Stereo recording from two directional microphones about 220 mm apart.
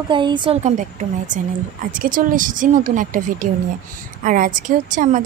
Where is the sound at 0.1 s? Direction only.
20° right (ahead or behind).